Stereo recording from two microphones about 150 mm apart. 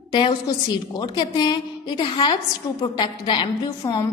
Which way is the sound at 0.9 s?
30° left (ahead or behind).